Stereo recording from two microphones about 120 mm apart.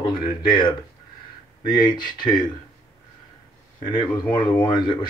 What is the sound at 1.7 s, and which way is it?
Speech, 35° left (ahead or behind).